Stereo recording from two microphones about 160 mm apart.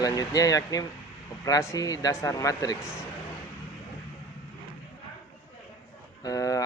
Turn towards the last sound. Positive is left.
turn(degrees=20)  # may be behind; listen again after turning